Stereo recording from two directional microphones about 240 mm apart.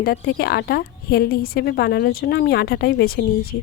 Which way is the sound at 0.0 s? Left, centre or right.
Left.